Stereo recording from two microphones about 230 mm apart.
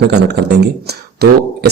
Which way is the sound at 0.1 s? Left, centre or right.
Right.